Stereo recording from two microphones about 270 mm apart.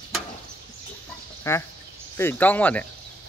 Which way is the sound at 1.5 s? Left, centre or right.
Centre.